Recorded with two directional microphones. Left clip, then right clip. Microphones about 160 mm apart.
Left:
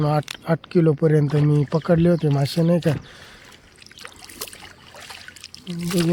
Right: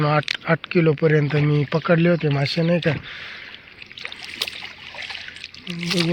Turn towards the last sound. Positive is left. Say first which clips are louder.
# right 2 dB
turn(degrees=60)  # may be behind; listen again after turning